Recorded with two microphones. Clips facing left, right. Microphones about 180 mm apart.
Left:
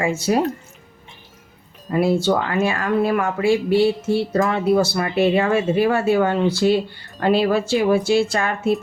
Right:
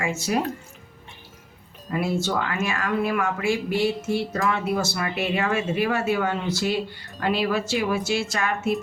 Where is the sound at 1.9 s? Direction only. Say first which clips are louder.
Left 7 dB; 35° left (ahead or behind).